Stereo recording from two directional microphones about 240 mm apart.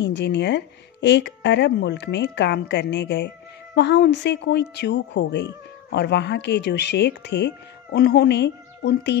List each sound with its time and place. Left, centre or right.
0.0 s speech: left